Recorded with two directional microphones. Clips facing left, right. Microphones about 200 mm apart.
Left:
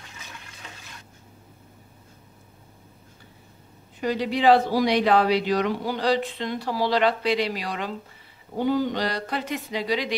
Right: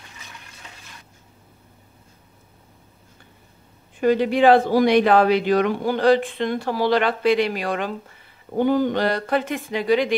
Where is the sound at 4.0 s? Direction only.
55° right (ahead or behind).